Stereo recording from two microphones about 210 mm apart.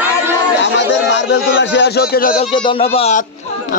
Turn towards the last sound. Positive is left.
turn(degrees=30)  # may be behind; listen again after turning